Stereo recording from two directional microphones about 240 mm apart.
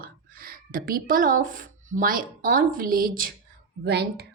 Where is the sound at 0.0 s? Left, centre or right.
Right.